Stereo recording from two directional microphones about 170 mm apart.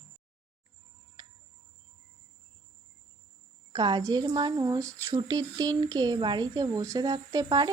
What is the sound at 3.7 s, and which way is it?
Speech, 25° right (ahead or behind).